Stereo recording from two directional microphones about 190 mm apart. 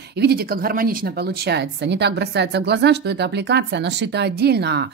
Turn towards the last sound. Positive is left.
turn(degrees=-60)  # may be behind; listen again after turning